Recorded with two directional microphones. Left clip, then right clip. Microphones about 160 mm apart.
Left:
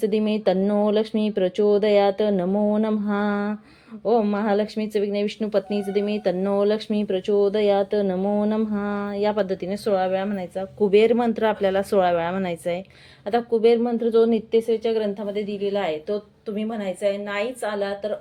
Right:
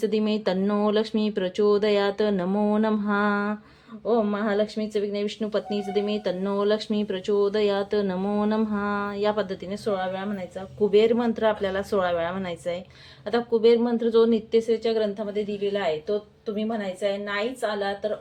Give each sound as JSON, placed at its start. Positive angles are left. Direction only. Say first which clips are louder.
{"t": 0.0, "sound": "speech", "louder": "left 3 dB", "side_deg": 20}
{"t": 4.0, "sound": "a woman's voice", "louder": "left 3 dB", "side_deg": 40}